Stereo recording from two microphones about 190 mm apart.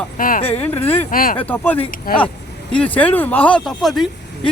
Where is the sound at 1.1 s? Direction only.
50° left (ahead or behind).